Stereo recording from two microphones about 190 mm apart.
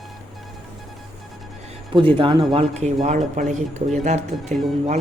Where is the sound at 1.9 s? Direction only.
25° right (ahead or behind).